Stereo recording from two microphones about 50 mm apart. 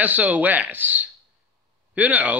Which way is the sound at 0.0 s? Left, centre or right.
Right.